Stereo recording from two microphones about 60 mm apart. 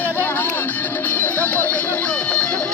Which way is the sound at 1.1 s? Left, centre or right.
Left.